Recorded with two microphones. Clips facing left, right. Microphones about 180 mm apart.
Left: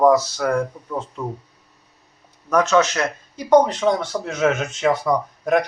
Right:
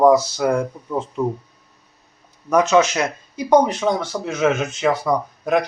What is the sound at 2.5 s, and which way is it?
A man's voice, 15° right (ahead or behind).